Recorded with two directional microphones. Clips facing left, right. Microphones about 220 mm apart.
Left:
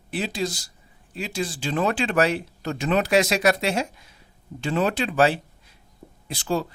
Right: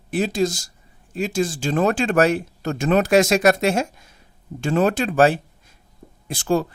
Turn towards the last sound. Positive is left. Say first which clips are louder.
# right 5 dB
turn(degrees=-50)  # may be behind; listen again after turning